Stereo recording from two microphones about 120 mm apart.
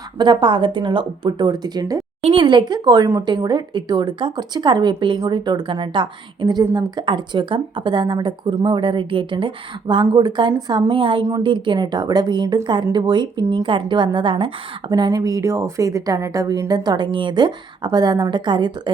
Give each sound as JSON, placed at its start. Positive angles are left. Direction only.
{"t": 0.2, "sound": "a woman's voice", "side_deg": -40}
{"t": 2.2, "sound": "a woman's voice", "side_deg": -45}
{"t": 14.8, "sound": "a woman's voice", "side_deg": -35}